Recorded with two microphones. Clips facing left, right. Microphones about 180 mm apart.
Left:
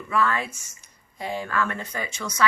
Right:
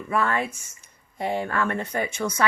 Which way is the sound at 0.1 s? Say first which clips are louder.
Even; 55° right (ahead or behind).